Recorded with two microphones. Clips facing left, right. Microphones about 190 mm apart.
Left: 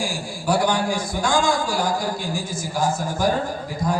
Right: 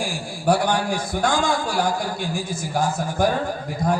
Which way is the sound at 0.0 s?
60° right (ahead or behind).